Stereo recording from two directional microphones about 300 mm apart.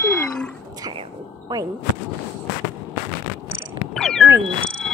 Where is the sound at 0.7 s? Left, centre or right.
Centre.